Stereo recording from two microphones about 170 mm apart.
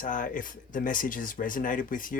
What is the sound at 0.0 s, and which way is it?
Speech, 50° left (ahead or behind).